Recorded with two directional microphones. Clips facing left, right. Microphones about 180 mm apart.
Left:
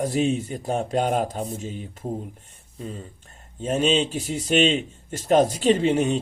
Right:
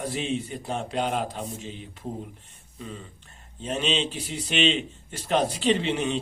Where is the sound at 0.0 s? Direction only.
45° left (ahead or behind).